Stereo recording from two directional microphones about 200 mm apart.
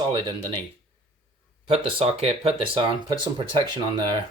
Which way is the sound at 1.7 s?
30° right (ahead or behind).